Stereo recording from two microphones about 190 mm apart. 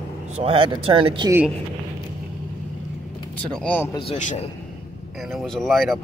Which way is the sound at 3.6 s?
10° left (ahead or behind).